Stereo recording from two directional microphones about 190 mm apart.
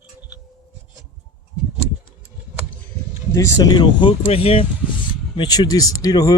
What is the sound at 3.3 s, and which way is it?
Speech, 15° left (ahead or behind).